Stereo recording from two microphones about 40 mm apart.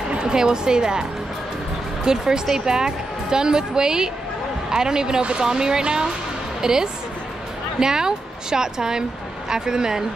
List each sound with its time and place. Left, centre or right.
0.1 s speech: right
2.0 s a woman's voice: centre